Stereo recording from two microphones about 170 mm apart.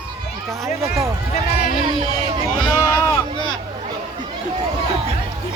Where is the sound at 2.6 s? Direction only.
20° left (ahead or behind).